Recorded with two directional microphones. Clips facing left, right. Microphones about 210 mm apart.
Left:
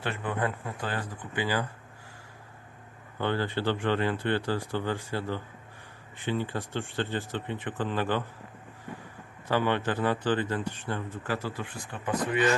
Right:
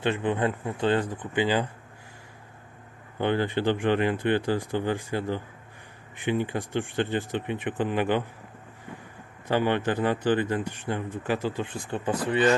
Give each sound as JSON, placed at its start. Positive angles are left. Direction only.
{"t": 0.0, "sound": "speech", "side_deg": -20}
{"t": 3.2, "sound": "speech", "side_deg": -15}
{"t": 9.5, "sound": "speech", "side_deg": -15}